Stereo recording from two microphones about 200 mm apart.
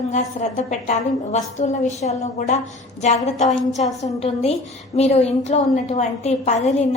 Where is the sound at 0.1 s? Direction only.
35° left (ahead or behind).